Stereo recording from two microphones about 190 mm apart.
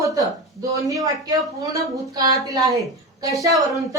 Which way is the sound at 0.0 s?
15° right (ahead or behind).